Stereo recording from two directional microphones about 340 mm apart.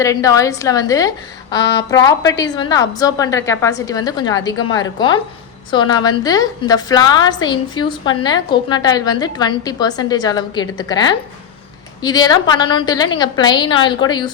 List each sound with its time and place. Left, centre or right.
0.0 s a woman's voice: centre
1.5 s speech: left
1.9 s a woman's voice: centre